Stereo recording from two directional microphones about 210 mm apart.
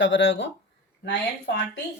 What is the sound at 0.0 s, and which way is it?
Speech, 60° left (ahead or behind).